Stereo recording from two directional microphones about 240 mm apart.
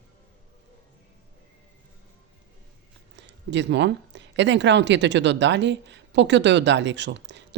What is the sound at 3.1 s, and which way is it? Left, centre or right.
Speech, right.